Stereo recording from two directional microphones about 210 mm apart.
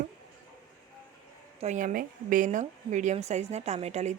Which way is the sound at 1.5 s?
35° right (ahead or behind).